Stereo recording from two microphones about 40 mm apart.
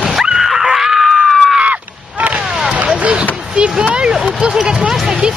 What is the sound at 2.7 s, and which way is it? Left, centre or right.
Vehicle, right.